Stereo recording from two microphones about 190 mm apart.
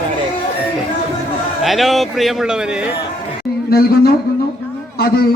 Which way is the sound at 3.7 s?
55° left (ahead or behind).